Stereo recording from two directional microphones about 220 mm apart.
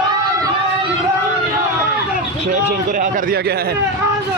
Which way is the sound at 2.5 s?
35° right (ahead or behind).